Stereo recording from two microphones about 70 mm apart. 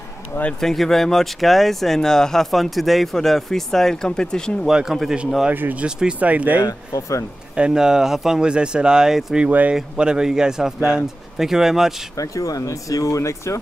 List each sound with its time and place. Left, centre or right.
0.6 s speech: centre
4.6 s speech: centre
5.5 s speech: right
5.9 s speech: centre
6.9 s speech: left
7.5 s speech: centre
9.5 s speech: right
9.8 s speech: centre
12.2 s speech: left